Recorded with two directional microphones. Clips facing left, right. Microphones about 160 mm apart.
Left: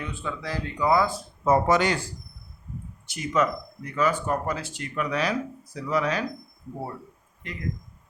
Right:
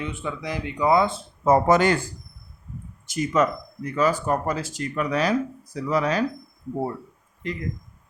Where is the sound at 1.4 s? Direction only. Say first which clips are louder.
Right 3 dB; 50° right (ahead or behind).